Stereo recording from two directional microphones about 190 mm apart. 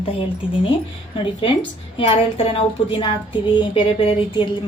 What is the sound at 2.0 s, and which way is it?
A woman's voice, 30° left (ahead or behind).